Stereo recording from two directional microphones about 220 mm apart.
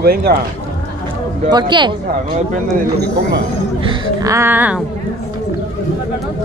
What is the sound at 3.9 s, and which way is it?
Speech, 15° right (ahead or behind).